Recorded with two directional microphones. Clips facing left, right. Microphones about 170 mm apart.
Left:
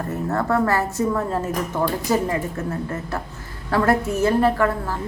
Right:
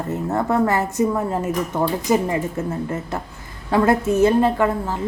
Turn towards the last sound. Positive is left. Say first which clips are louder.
# right 1 dB
turn(degrees=-20)  # may be behind; listen again after turning